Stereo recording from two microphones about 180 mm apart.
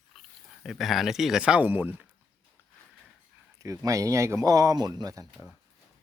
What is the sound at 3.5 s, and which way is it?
Speech, 20° right (ahead or behind).